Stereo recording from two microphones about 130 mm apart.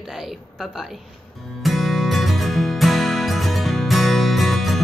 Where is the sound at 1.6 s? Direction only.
Centre (ahead or behind).